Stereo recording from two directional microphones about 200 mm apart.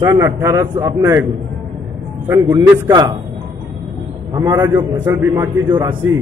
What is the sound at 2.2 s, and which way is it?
Speech, 15° right (ahead or behind).